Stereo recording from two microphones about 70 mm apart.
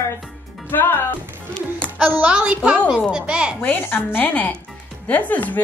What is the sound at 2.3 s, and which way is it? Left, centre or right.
A woman's voice, centre.